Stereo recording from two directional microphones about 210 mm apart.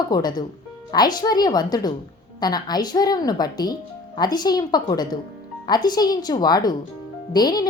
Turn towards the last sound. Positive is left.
turn(degrees=20)  # may be behind; listen again after turning